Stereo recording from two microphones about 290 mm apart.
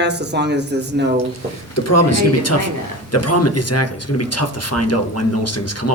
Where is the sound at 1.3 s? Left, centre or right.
Left.